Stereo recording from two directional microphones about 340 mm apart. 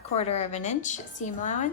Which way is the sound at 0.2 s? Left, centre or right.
Centre.